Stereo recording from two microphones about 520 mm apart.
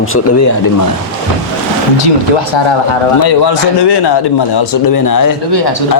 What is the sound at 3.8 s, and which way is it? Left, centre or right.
Speech, left.